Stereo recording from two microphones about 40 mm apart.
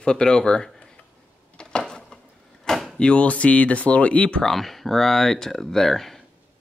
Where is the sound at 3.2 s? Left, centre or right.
Left.